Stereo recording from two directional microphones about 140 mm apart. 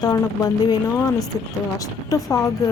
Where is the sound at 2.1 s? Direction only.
25° left (ahead or behind).